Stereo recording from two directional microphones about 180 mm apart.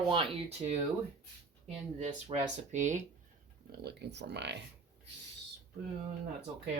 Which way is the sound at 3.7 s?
70° right (ahead or behind).